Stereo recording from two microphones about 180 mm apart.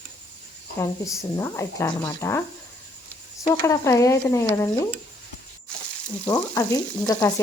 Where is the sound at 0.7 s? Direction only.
15° left (ahead or behind).